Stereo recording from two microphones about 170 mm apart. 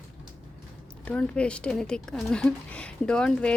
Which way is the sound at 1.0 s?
5° left (ahead or behind).